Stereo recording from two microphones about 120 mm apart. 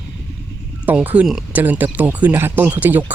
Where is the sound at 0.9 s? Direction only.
15° right (ahead or behind).